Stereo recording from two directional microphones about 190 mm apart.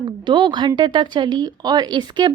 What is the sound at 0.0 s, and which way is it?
Speech, 25° right (ahead or behind).